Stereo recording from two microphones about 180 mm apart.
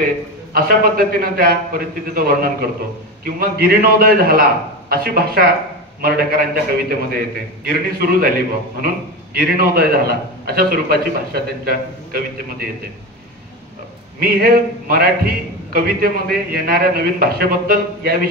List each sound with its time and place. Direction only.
0.0 s a man's voice: 55° right (ahead or behind)
14.2 s a man's voice: 55° right (ahead or behind)